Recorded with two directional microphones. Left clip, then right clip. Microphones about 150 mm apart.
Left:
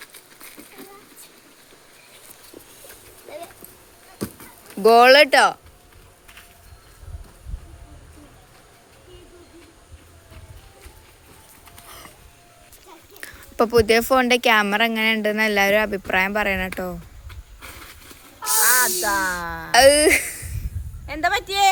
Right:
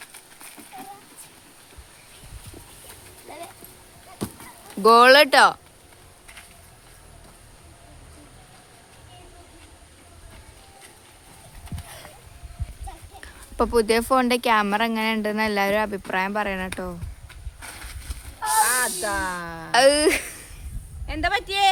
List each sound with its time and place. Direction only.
0.0 s a sound: 5° right (ahead or behind)
4.2 s a sound: centre (ahead or behind)
13.2 s a woman's voice: 10° left (ahead or behind)
17.2 s vehicle: 5° right (ahead or behind)
18.4 s snake: 5° left (ahead or behind)
19.5 s speech: 15° left (ahead or behind)
19.7 s speech: 5° right (ahead or behind)
21.1 s a man's voice: 15° left (ahead or behind)